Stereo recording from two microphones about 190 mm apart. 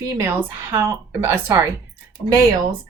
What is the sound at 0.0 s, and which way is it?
A woman's voice, 15° right (ahead or behind).